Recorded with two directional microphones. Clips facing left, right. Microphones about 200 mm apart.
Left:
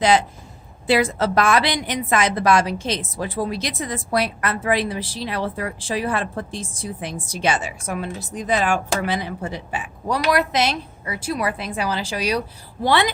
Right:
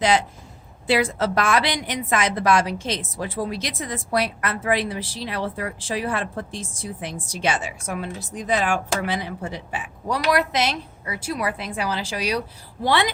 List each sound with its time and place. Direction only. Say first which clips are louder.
0.9 s a woman's voice: left 2 dB; 40° left (ahead or behind)